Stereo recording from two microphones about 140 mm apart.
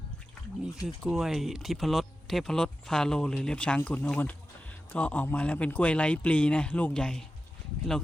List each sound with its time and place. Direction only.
0.9 s speech: centre (ahead or behind)